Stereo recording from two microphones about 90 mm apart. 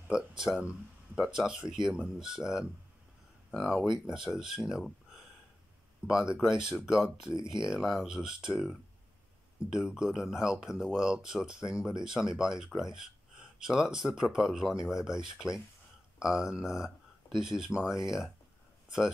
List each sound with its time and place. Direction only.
0.6 s speech: 10° right (ahead or behind)
6.0 s speech: 10° right (ahead or behind)
7.3 s speech: 60° right (ahead or behind)
7.6 s speech: 5° right (ahead or behind)